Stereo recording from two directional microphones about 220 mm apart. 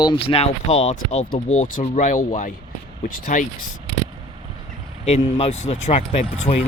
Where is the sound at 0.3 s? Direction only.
25° left (ahead or behind).